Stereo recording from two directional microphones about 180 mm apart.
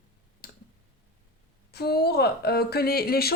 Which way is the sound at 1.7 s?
60° left (ahead or behind).